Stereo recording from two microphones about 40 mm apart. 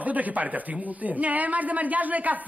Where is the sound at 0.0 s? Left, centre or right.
Right.